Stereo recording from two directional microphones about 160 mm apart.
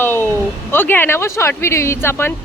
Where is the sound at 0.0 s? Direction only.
15° left (ahead or behind).